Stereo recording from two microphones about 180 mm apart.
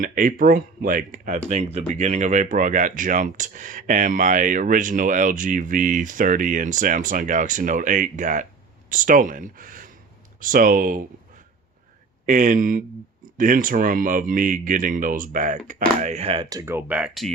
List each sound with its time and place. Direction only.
0.0 s speech: 50° right (ahead or behind)
12.2 s speech: 45° right (ahead or behind)
16.5 s speech: 15° right (ahead or behind)